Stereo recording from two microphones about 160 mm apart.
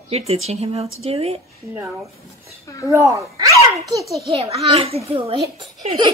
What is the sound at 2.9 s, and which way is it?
Speech, 20° right (ahead or behind).